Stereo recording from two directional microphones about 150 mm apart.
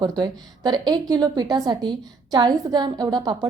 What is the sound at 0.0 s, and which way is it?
A woman's voice, 25° right (ahead or behind).